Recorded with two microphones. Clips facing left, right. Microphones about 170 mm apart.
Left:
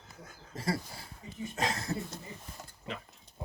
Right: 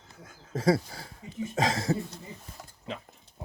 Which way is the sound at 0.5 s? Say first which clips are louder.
Right 10 dB; 90° right.